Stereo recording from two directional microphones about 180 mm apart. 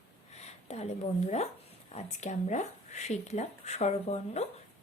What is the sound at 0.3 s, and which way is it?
A woman's voice, 35° left (ahead or behind).